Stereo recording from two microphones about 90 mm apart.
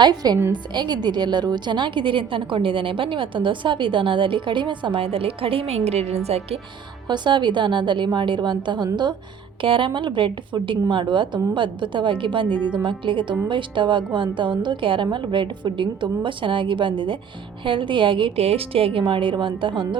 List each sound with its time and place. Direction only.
0.0 s a woman's voice: 50° right (ahead or behind); by 5.6 s 90° right
7.1 s a woman's voice: 60° right (ahead or behind)
9.6 s a woman's voice: 70° right (ahead or behind)